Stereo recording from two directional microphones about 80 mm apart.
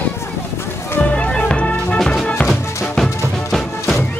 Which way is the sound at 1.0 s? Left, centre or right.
Centre.